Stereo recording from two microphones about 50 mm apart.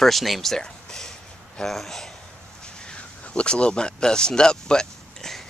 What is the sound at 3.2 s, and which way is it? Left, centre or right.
Speech, left.